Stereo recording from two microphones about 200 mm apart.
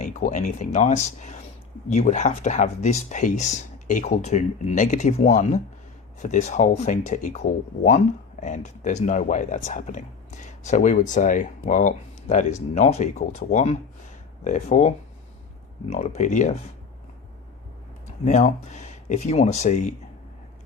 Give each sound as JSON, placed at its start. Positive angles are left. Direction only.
{"t": 0.0, "sound": "speech", "side_deg": 35}
{"t": 18.3, "sound": "speech", "side_deg": 35}